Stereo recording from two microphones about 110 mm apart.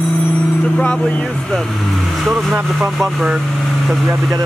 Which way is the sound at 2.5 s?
15° right (ahead or behind).